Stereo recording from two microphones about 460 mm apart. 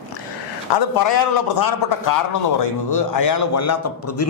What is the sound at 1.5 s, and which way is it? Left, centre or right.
A man's voice, left.